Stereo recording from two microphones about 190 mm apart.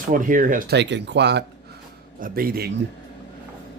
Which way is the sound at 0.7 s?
65° right (ahead or behind).